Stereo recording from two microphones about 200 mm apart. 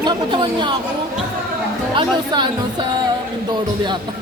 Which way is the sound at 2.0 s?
20° right (ahead or behind).